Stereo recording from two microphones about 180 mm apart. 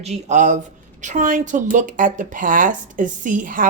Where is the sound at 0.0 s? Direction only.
40° right (ahead or behind).